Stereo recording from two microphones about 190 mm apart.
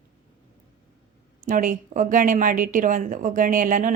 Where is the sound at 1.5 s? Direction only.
45° right (ahead or behind).